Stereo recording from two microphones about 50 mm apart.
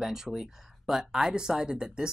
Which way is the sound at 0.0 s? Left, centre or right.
Centre.